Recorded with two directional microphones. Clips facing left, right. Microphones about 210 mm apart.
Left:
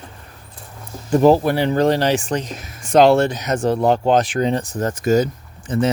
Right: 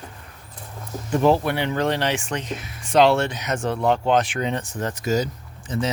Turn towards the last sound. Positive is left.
turn(degrees=55)  # may be behind; listen again after turning